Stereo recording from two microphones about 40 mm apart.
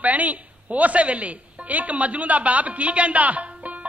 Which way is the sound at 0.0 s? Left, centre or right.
Right.